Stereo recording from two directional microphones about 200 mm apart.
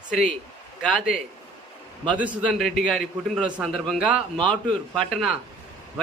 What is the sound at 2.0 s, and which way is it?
Speech, 25° right (ahead or behind).